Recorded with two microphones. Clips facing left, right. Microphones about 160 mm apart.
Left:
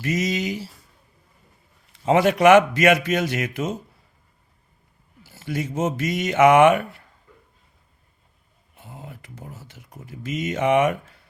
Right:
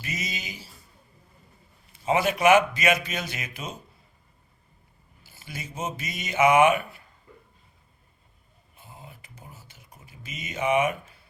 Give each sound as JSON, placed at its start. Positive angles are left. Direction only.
{"t": 0.2, "sound": "a man's voice", "side_deg": 80}
{"t": 1.9, "sound": "a man's voice", "side_deg": 65}
{"t": 5.2, "sound": "a man's voice", "side_deg": 75}
{"t": 8.7, "sound": "a sound", "side_deg": 70}
{"t": 10.0, "sound": "a man's voice", "side_deg": 75}